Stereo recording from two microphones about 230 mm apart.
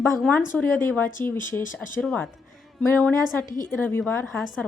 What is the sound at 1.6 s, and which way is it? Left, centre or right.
Speech, left.